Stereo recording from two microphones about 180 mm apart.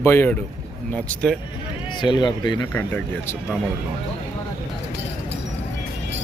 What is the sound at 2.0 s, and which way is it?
Speech, 25° left (ahead or behind).